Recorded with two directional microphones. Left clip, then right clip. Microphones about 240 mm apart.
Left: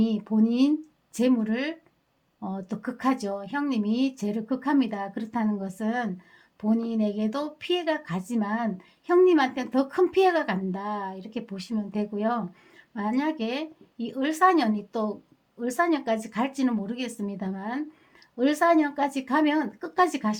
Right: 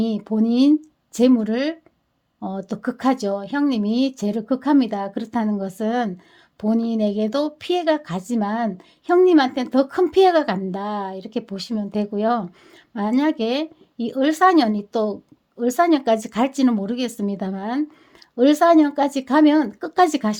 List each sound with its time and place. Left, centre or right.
0.0 s speech: right